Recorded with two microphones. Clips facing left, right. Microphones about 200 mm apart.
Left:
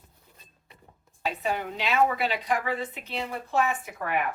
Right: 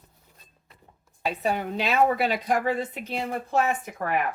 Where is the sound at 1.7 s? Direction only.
40° right (ahead or behind).